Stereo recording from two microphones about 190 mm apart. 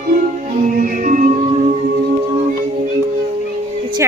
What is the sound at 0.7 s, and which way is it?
Music, 45° right (ahead or behind).